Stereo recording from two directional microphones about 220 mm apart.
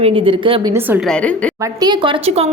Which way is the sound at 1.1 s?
5° left (ahead or behind).